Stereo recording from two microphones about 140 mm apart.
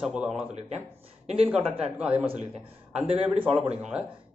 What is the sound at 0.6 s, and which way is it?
Speech, 55° right (ahead or behind).